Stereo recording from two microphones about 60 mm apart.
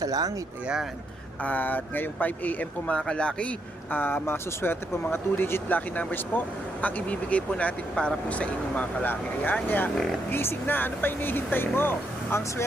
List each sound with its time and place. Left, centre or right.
0.0 s speech: right
1.4 s speech: left
3.9 s speech: left